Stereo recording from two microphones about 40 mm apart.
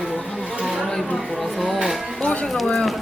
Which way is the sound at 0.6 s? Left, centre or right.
Centre.